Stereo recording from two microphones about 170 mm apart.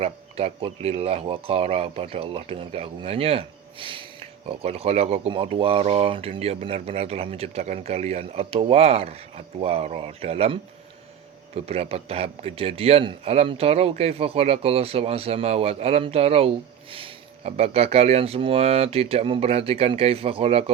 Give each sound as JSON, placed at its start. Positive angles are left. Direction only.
{"t": 0.0, "sound": "speech", "side_deg": -35}